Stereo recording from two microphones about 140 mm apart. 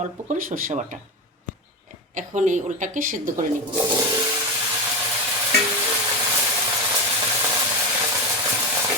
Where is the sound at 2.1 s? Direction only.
65° right (ahead or behind).